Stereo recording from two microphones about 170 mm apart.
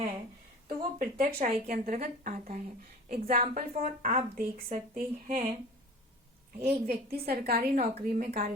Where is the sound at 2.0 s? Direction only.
45° right (ahead or behind).